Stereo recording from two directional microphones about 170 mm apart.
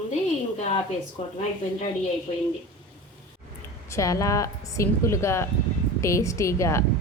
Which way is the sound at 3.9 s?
20° left (ahead or behind).